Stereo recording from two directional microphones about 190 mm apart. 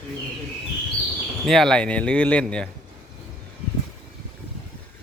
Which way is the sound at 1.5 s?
Centre (ahead or behind).